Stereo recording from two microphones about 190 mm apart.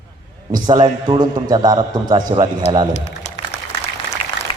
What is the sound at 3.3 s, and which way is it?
Applause, 35° left (ahead or behind).